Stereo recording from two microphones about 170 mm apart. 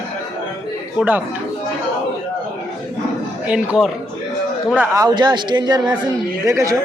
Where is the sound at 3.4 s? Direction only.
5° right (ahead or behind).